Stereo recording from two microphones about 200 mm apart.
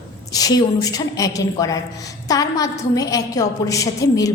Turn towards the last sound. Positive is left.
turn(degrees=15)  # may be behind; listen again after turning